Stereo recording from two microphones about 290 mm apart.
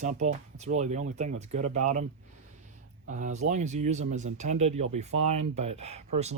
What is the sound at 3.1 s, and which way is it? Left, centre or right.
Speech, right.